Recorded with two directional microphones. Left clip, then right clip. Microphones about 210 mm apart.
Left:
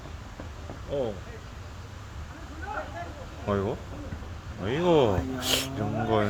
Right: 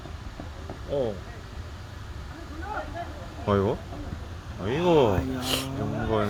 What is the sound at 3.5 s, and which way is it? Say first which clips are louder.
Speech: right 4 dB; 25° right (ahead or behind).